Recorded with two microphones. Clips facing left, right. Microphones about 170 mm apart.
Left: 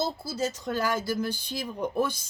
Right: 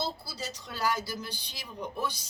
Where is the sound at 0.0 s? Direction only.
45° left (ahead or behind).